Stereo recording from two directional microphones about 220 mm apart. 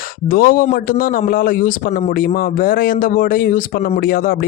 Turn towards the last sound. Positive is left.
turn(degrees=40)  # may be behind; listen again after turning